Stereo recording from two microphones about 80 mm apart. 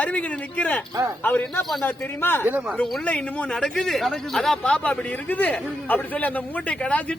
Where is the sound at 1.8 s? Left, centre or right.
Left.